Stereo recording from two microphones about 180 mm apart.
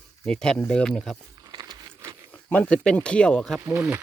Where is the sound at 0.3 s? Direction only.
5° left (ahead or behind).